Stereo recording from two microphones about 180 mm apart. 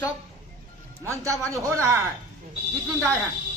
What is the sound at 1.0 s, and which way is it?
Speech, 15° right (ahead or behind).